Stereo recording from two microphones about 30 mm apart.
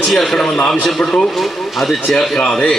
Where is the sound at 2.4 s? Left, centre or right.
Centre.